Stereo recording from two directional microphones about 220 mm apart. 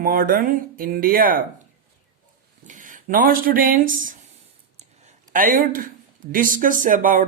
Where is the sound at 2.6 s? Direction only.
35° right (ahead or behind).